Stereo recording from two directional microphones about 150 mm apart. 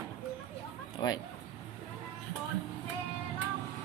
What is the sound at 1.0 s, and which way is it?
Speech, 30° left (ahead or behind).